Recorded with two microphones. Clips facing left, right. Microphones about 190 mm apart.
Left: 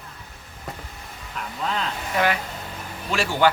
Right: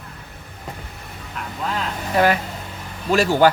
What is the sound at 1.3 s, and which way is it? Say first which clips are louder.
Speech: right 1 dB; 5° right (ahead or behind).